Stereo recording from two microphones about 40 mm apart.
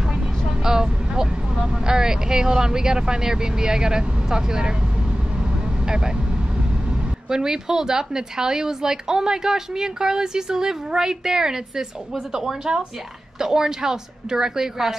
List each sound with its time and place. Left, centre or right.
0.7 s speech: centre
5.9 s speech: centre
7.2 s speech: centre